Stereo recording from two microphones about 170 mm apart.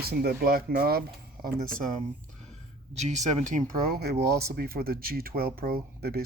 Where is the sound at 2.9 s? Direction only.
45° right (ahead or behind).